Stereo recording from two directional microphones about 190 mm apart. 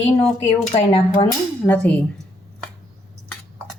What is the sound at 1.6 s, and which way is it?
Speech, 10° left (ahead or behind).